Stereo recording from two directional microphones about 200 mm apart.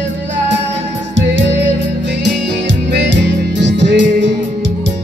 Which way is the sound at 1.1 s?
65° right (ahead or behind).